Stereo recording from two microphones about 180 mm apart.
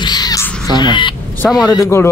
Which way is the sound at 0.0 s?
20° left (ahead or behind).